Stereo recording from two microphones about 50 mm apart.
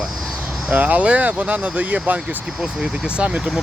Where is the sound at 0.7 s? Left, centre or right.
Right.